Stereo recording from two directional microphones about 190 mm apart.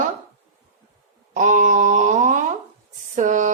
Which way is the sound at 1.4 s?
40° right (ahead or behind).